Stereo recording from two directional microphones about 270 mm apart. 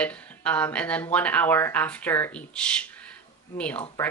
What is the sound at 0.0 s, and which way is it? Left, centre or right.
A woman's voice, centre.